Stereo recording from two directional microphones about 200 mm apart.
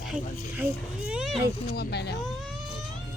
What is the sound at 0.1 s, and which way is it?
Speech, 5° right (ahead or behind).